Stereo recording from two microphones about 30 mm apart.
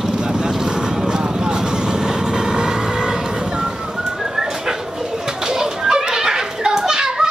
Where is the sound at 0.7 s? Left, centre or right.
Right.